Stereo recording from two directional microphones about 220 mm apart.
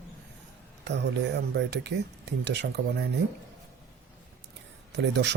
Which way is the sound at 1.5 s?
50° right (ahead or behind).